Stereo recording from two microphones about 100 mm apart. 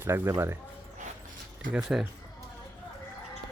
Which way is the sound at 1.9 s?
10° right (ahead or behind).